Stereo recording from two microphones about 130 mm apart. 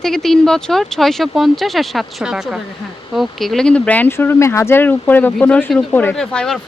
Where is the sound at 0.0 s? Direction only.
5° left (ahead or behind).